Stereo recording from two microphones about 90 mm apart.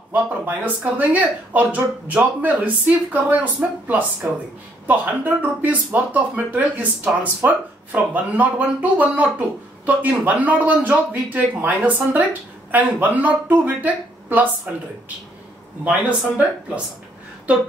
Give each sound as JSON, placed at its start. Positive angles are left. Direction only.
{"t": 0.1, "sound": "a man's voice", "side_deg": -20}
{"t": 15.8, "sound": "a man's voice", "side_deg": -15}